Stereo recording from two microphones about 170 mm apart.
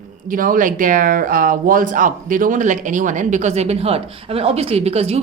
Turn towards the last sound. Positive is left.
turn(degrees=-40)  # may be behind; listen again after turning